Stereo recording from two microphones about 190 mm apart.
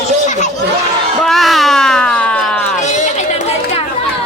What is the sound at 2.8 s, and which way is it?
Chatter, 40° left (ahead or behind).